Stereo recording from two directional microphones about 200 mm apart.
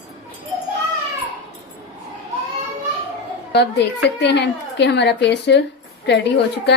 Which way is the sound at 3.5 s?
60° left (ahead or behind).